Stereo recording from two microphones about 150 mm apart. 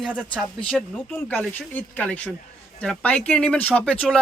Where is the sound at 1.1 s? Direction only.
10° left (ahead or behind).